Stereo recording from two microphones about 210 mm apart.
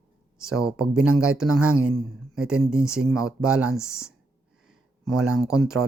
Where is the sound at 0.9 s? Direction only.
90° right.